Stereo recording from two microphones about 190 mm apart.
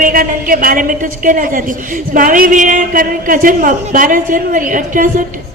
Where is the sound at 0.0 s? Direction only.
50° right (ahead or behind).